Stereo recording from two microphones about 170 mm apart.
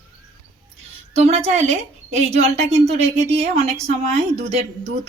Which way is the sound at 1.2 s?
40° right (ahead or behind).